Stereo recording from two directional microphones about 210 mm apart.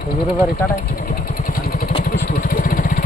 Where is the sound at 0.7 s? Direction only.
40° left (ahead or behind).